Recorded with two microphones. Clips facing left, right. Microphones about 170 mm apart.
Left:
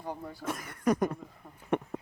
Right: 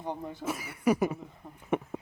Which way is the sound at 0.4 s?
5° right (ahead or behind).